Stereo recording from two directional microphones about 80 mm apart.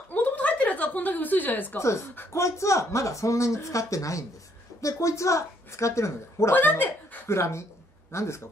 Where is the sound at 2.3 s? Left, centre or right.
Left.